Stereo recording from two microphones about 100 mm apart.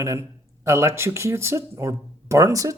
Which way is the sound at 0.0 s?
30° right (ahead or behind).